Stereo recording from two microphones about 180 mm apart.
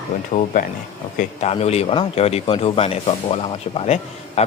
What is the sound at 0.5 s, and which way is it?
Speech, 50° left (ahead or behind).